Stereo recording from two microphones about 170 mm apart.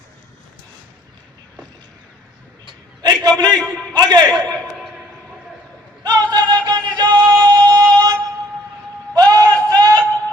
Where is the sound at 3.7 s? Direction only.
25° right (ahead or behind).